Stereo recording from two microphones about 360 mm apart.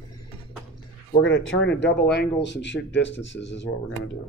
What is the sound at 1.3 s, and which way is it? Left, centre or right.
Speech, left.